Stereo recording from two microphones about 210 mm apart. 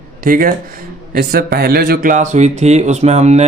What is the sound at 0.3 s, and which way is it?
Speech, 40° right (ahead or behind).